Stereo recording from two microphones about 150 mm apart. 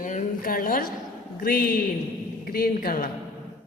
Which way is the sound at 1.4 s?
90° left.